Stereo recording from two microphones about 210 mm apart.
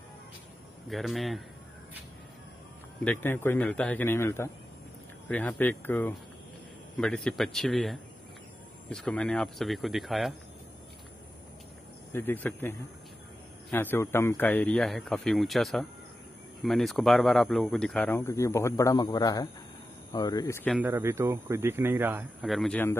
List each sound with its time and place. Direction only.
0.8 s speech: centre (ahead or behind)
3.0 s speech: 10° left (ahead or behind)
12.1 s speech: 10° left (ahead or behind)
20.7 s speech: 10° right (ahead or behind); by 22.9 s 5° left (ahead or behind)